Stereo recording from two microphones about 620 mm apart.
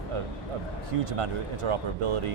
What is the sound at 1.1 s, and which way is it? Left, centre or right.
Speech, right.